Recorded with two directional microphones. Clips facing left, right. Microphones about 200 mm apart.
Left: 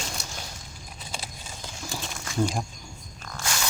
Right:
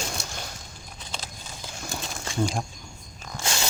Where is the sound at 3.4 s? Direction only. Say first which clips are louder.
Right 2 dB; 25° right (ahead or behind).